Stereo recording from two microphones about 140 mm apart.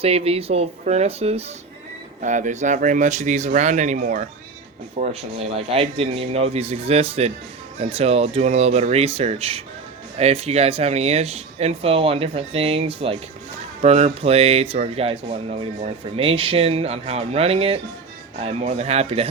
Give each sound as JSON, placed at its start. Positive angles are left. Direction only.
{"t": 0.0, "sound": "speech", "side_deg": -45}
{"t": 2.2, "sound": "speech", "side_deg": -60}
{"t": 4.9, "sound": "speech", "side_deg": -45}